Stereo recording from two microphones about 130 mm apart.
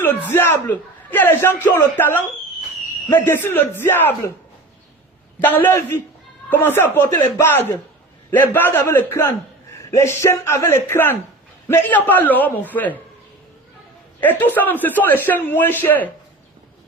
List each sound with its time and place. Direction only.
0.0 s a man's voice: 15° left (ahead or behind)
5.4 s a man's voice: 15° left (ahead or behind)
14.2 s a man's voice: 15° left (ahead or behind)